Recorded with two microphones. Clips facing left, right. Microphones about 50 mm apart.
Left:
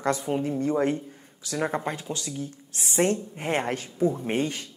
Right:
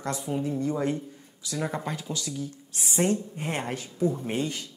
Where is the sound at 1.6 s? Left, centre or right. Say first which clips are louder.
Left 3 dB; left.